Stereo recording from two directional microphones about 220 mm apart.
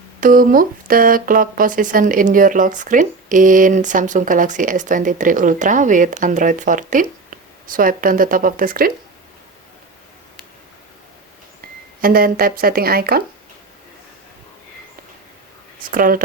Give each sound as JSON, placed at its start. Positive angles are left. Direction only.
{"t": 0.2, "sound": "speech", "side_deg": -40}
{"t": 11.9, "sound": "speech", "side_deg": -40}
{"t": 15.8, "sound": "speech", "side_deg": -40}